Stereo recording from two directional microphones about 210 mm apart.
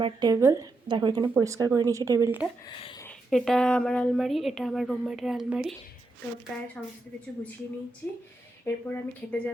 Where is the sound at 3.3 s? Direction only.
Centre (ahead or behind).